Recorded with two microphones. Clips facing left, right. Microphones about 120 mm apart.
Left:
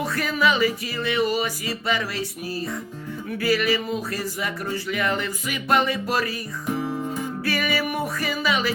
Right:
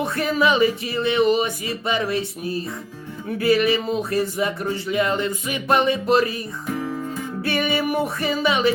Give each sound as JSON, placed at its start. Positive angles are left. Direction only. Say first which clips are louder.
{"t": 0.0, "sound": "speech", "louder": "right 2 dB", "side_deg": -25}
{"t": 6.7, "sound": "guitar", "louder": "left 1 dB", "side_deg": 15}
{"t": 7.4, "sound": "music", "louder": "right 4 dB", "side_deg": -25}